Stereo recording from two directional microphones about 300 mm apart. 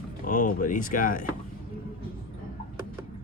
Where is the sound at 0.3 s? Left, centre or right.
Left.